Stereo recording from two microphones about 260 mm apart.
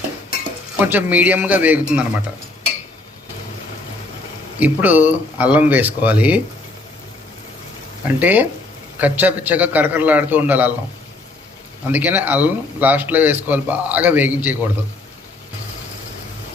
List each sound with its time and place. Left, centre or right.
0.9 s speech: centre
4.6 s speech: centre
8.0 s a man's voice: centre
11.9 s a man's voice: centre